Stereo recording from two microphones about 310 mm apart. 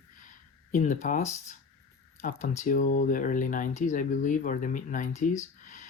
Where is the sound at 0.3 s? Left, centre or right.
Left.